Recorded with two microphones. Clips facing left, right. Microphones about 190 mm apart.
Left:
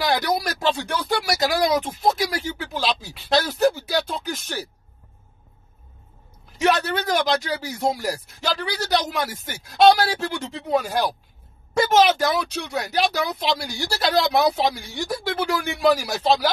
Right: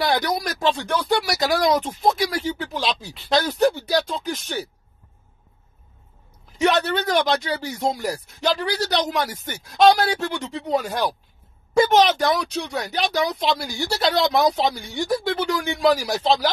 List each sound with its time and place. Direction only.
0.0 s speech: centre (ahead or behind)
6.6 s speech: centre (ahead or behind)